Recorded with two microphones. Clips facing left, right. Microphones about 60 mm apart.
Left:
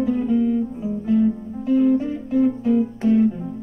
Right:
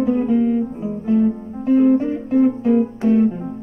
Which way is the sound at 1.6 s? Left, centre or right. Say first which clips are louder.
Right 3 dB; right.